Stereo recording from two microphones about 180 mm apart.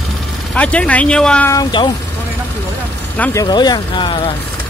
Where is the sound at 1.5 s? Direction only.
25° left (ahead or behind).